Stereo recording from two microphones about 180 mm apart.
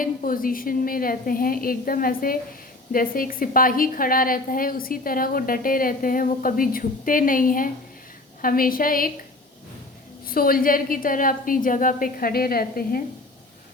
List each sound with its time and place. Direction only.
0.0 s a woman's voice: 50° left (ahead or behind)
10.2 s a woman's voice: 55° left (ahead or behind)